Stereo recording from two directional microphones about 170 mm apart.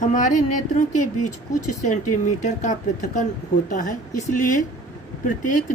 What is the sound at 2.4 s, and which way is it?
Speech, 45° left (ahead or behind).